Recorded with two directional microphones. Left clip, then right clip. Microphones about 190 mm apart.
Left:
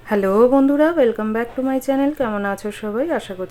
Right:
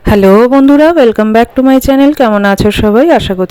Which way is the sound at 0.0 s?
50° right (ahead or behind).